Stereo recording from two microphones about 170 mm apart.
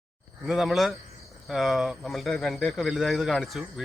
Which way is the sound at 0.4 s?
Centre (ahead or behind).